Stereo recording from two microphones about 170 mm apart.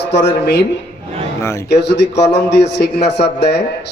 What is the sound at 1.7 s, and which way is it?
A man's voice, 80° left.